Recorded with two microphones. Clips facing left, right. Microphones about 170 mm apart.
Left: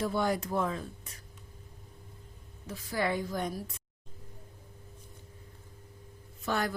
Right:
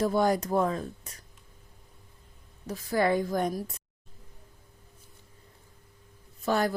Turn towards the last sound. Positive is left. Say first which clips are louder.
# right 5 dB
turn(degrees=-35)  # may be behind; listen again after turning